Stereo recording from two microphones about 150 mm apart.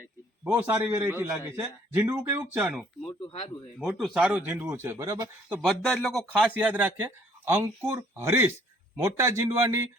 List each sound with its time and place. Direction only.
0.4 s speech: 10° right (ahead or behind)
5.6 s speech: 5° left (ahead or behind)
6.6 s a man's voice: 10° right (ahead or behind)